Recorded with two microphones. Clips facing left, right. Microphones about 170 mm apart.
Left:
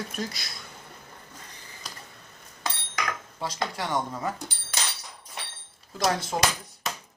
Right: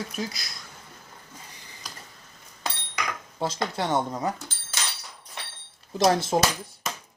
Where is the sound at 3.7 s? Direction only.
20° right (ahead or behind).